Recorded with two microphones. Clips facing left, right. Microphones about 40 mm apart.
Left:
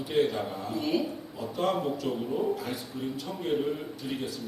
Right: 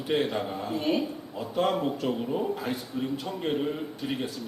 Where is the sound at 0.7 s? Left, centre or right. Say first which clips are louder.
Right 2 dB; right.